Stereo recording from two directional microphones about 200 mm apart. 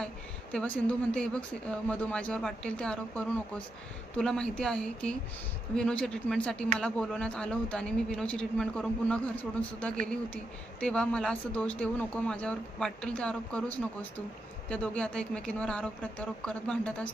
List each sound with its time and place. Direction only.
0.5 s speech: 5° left (ahead or behind)